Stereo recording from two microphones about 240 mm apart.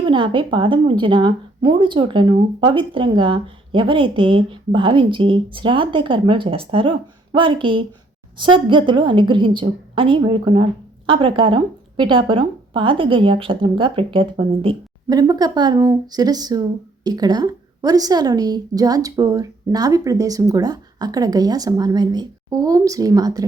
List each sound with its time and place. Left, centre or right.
0.0 s a woman's voice: centre